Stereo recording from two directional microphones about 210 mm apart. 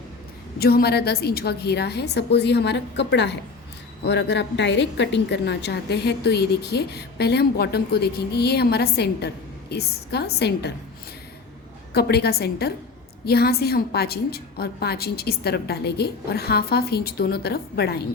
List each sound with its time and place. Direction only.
0.6 s a woman's voice: 45° left (ahead or behind)
11.9 s a woman's voice: 50° left (ahead or behind)